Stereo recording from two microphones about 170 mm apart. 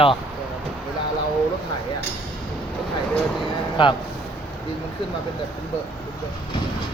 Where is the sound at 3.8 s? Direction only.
30° left (ahead or behind).